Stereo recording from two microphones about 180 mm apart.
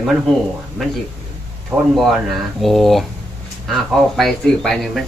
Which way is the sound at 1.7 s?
10° right (ahead or behind).